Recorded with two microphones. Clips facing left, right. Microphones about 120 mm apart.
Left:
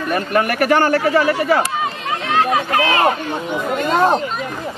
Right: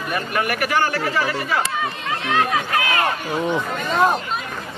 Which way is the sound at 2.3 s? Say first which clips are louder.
Left 4 dB; 25° left (ahead or behind).